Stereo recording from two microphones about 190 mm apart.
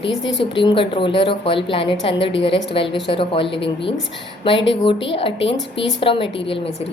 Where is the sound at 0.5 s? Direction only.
25° left (ahead or behind).